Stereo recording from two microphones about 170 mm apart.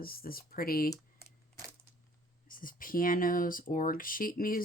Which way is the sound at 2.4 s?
55° left (ahead or behind).